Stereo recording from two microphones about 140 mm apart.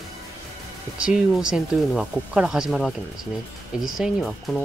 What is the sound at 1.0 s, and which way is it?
Speech, 5° right (ahead or behind).